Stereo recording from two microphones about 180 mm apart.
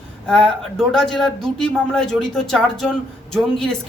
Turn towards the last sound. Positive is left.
turn(degrees=0)  # may be behind; listen again after turning